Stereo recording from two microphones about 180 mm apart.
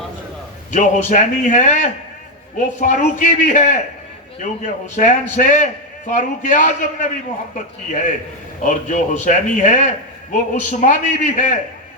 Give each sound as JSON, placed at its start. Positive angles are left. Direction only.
{"t": 0.7, "sound": "a man's voice", "side_deg": 45}